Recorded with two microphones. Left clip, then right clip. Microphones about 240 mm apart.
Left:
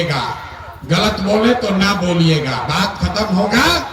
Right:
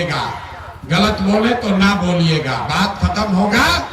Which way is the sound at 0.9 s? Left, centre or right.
Left.